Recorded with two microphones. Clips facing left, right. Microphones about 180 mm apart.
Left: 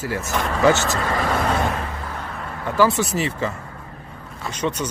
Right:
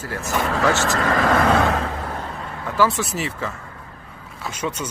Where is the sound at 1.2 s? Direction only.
90° right.